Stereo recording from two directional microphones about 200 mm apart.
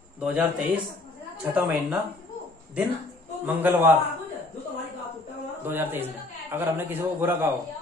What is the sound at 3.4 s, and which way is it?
Speech, 10° right (ahead or behind).